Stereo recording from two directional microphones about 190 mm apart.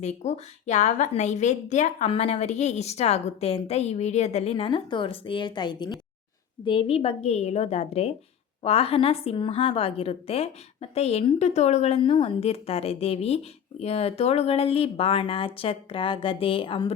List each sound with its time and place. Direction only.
0.0 s a woman's voice: 35° left (ahead or behind)